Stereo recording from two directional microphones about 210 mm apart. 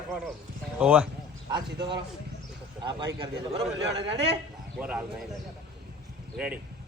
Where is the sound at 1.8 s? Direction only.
20° right (ahead or behind).